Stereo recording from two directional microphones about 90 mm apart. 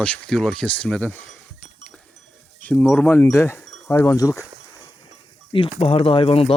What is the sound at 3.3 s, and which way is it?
Speech, 30° left (ahead or behind).